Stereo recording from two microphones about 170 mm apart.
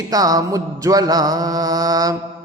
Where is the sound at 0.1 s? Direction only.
20° right (ahead or behind).